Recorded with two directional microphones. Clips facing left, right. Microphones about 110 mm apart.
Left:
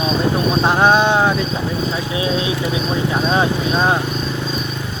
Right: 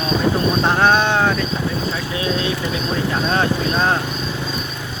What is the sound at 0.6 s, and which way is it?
Bird, 15° left (ahead or behind).